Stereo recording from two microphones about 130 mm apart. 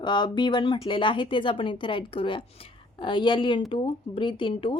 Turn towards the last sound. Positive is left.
turn(degrees=40)  # may be behind; listen again after turning